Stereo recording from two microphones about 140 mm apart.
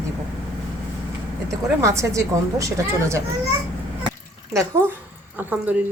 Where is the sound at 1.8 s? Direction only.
20° right (ahead or behind).